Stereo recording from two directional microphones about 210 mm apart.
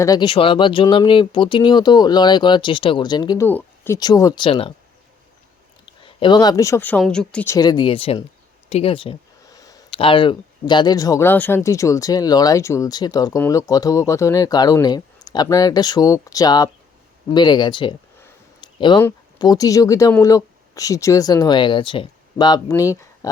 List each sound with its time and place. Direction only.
0.0 s speech: 20° left (ahead or behind)
5.8 s speech: 25° left (ahead or behind)